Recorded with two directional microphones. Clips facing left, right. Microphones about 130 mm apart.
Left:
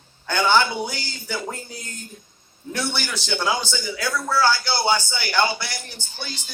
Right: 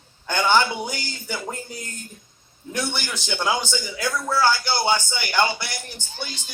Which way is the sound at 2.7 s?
15° right (ahead or behind).